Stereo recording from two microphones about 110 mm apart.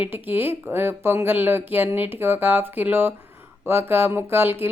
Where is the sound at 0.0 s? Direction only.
20° right (ahead or behind).